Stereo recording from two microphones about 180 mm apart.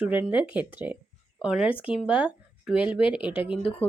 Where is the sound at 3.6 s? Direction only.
30° left (ahead or behind).